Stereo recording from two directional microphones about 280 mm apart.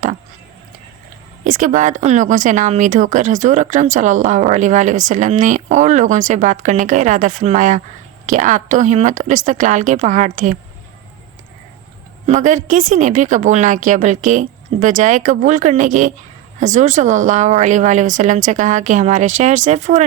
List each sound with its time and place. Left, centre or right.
1.5 s speech: right
12.2 s a woman's voice: right